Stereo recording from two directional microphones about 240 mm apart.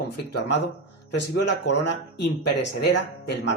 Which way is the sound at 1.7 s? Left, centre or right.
Left.